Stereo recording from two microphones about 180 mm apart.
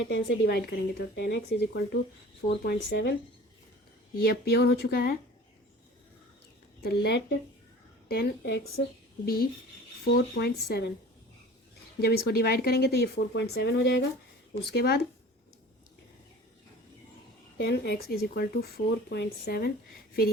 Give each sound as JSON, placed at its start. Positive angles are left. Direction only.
{"t": 0.0, "sound": "speech", "side_deg": 75}
{"t": 4.2, "sound": "speech", "side_deg": 60}
{"t": 6.8, "sound": "speech", "side_deg": 70}
{"t": 9.2, "sound": "speech", "side_deg": 55}
{"t": 11.9, "sound": "speech", "side_deg": 60}
{"t": 17.6, "sound": "speech", "side_deg": 65}